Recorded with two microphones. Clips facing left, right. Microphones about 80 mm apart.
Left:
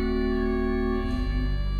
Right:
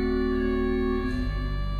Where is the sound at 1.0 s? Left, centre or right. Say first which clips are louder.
Even; right.